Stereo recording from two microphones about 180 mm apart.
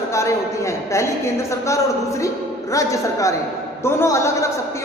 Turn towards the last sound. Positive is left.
turn(degrees=15)  # may be behind; listen again after turning